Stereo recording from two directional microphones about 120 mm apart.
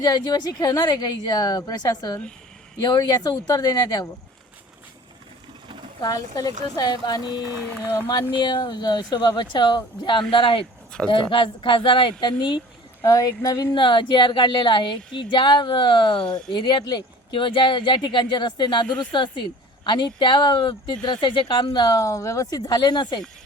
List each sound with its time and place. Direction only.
0.0 s speech: 35° left (ahead or behind)
6.0 s speech: 30° left (ahead or behind)
13.0 s speech: 30° left (ahead or behind)
18.9 s speech: 5° left (ahead or behind)
19.1 s speech: 45° left (ahead or behind)